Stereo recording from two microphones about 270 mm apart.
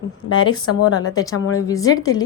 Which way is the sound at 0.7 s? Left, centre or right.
Left.